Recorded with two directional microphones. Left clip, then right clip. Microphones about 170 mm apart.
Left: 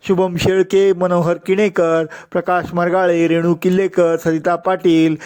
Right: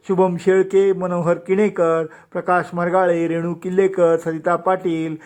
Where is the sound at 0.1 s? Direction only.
30° left (ahead or behind).